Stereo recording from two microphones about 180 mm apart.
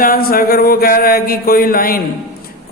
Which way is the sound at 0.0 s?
55° left (ahead or behind).